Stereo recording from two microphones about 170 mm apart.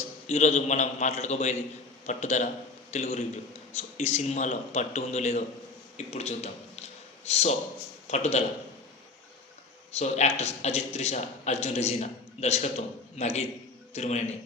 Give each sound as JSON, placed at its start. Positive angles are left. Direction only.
{"t": 0.3, "sound": "a man's voice", "side_deg": 40}
{"t": 9.9, "sound": "a man's voice", "side_deg": 40}